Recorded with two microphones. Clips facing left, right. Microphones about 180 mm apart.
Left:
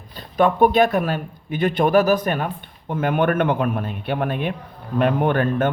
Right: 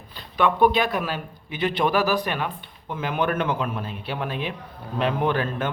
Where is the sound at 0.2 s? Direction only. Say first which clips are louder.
Left 3 dB; 45° left (ahead or behind).